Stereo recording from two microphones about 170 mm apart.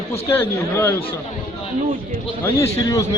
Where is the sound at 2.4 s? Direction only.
15° left (ahead or behind).